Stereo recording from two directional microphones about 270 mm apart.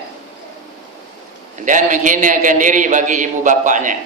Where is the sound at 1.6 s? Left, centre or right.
Right.